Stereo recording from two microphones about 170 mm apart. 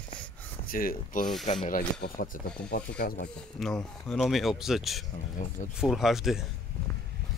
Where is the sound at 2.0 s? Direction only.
55° left (ahead or behind).